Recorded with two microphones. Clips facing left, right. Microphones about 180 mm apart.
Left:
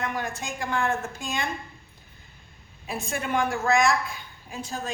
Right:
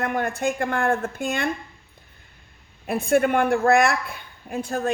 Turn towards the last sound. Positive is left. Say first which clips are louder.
# right 8 dB
turn(degrees=-55)  # may be behind; listen again after turning